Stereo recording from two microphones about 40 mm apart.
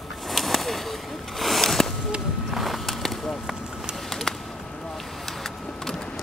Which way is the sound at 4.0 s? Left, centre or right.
Centre.